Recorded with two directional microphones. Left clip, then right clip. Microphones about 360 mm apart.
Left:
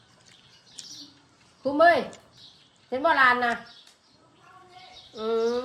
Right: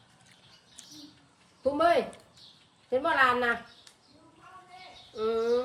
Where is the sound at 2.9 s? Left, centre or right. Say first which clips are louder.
Left 4 dB; centre.